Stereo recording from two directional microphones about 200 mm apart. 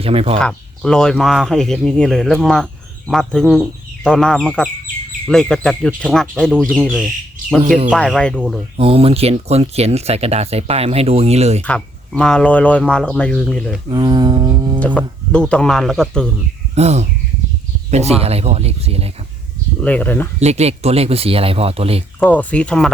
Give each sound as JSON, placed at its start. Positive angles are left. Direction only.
{"t": 0.0, "sound": "speech", "side_deg": -30}
{"t": 0.3, "sound": "speech", "side_deg": 5}
{"t": 8.8, "sound": "speech", "side_deg": -30}
{"t": 11.6, "sound": "speech", "side_deg": 5}
{"t": 13.9, "sound": "a sound", "side_deg": -20}
{"t": 14.8, "sound": "speech", "side_deg": 5}
{"t": 16.7, "sound": "speech", "side_deg": -35}
{"t": 19.8, "sound": "speech", "side_deg": 5}
{"t": 20.4, "sound": "speech", "side_deg": -35}
{"t": 22.2, "sound": "speech", "side_deg": 5}